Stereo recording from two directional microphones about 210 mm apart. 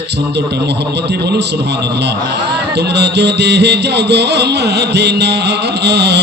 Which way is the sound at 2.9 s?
55° right (ahead or behind).